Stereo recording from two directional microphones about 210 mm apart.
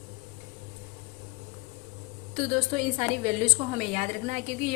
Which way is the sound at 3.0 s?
30° right (ahead or behind).